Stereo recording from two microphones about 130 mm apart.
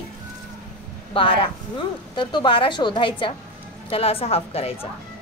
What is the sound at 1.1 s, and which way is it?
A woman's voice, 45° left (ahead or behind).